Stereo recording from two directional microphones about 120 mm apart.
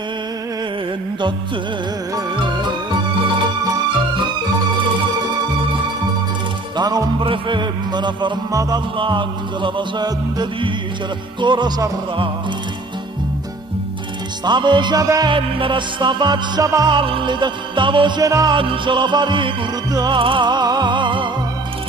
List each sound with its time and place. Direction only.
6.8 s music: 35° right (ahead or behind)
14.4 s music: 40° right (ahead or behind)
16.9 s music: 45° right (ahead or behind)